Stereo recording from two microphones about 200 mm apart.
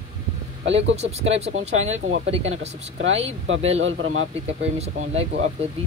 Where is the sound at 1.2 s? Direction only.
30° right (ahead or behind).